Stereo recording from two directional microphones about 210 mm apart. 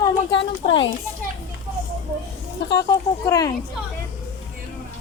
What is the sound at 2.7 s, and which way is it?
Speech, 15° left (ahead or behind).